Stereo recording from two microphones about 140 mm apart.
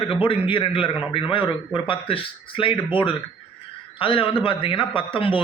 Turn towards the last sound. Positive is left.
turn(degrees=35)  # may be behind; listen again after turning